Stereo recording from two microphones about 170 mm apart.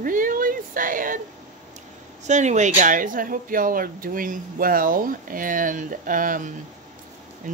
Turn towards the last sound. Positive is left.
turn(degrees=-50)  # may be behind; listen again after turning